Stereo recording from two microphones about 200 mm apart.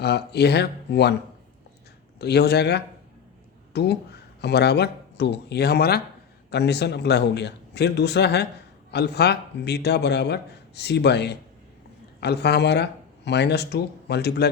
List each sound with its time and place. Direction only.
0.0 s speech: 55° left (ahead or behind)
2.1 s speech: 55° left (ahead or behind)